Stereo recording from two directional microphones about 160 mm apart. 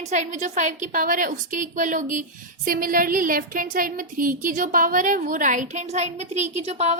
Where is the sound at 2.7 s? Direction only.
65° right (ahead or behind).